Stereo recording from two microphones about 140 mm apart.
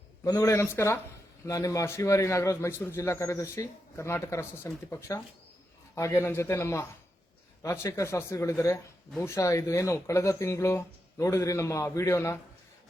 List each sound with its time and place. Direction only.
0.3 s speech: 20° left (ahead or behind)